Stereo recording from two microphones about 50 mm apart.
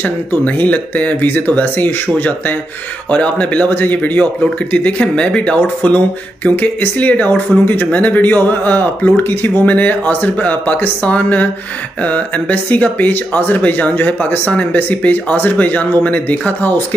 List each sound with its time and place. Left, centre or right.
0.0 s speech: left
3.1 s speech: left